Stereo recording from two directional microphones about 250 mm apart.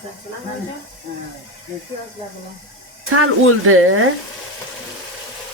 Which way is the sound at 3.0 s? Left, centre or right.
Right.